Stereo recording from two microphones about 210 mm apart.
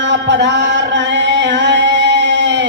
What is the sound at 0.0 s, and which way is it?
Music, 60° right (ahead or behind).